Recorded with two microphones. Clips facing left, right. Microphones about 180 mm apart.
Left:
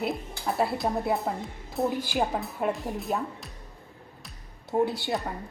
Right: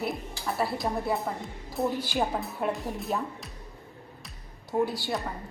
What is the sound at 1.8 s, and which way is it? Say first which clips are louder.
Speech: left 1 dB; centre (ahead or behind).